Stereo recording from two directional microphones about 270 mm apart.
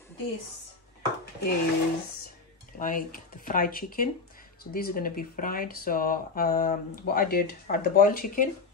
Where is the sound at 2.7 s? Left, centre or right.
Left.